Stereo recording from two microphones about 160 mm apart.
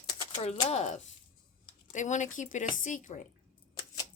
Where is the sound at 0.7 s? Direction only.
45° left (ahead or behind).